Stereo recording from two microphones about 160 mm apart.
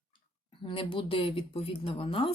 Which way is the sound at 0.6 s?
35° left (ahead or behind).